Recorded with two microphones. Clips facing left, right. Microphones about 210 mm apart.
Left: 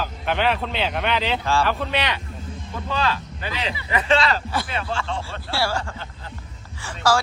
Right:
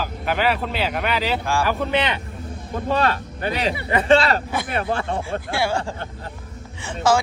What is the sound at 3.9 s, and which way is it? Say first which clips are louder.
Speech: right 4 dB; 30° right (ahead or behind).